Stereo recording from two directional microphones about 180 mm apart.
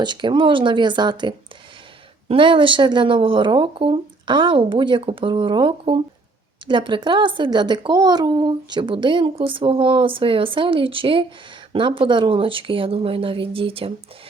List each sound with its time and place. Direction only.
0.0 s speech: 25° right (ahead or behind)